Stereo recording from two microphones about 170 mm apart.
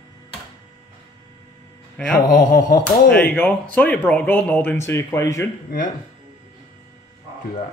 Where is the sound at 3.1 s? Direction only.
10° left (ahead or behind).